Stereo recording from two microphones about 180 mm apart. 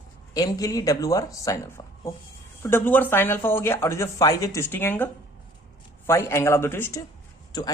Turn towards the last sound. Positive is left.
turn(degrees=20)  # may be behind; listen again after turning